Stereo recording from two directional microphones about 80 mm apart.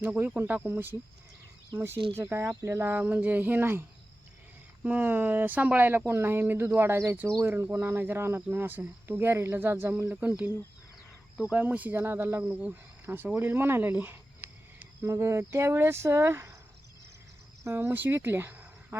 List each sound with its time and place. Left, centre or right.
0.0 s speech: right
11.5 s speech: centre
15.0 s speech: right
17.6 s speech: right
17.9 s speech: right